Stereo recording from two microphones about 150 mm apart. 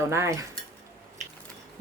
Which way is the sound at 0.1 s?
20° right (ahead or behind).